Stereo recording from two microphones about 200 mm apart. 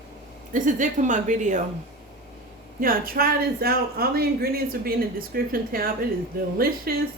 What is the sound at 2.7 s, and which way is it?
Speech, 45° right (ahead or behind).